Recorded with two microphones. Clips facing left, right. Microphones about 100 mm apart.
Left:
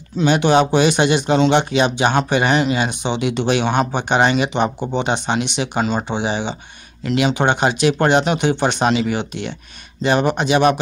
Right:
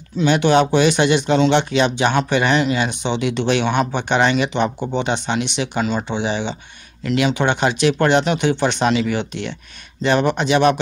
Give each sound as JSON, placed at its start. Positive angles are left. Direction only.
{"t": 0.3, "sound": "speech", "side_deg": 15}
{"t": 3.6, "sound": "speech", "side_deg": 40}
{"t": 3.9, "sound": "speech", "side_deg": 15}
{"t": 5.8, "sound": "speech", "side_deg": 35}
{"t": 6.0, "sound": "speech", "side_deg": 15}
{"t": 8.8, "sound": "speech", "side_deg": 25}
{"t": 9.1, "sound": "speech", "side_deg": 10}